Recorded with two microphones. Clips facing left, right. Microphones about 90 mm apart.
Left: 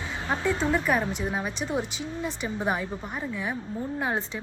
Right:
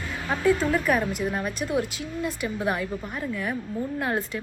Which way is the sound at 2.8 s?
25° left (ahead or behind).